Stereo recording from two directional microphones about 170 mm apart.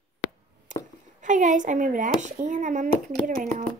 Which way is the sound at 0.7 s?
50° right (ahead or behind).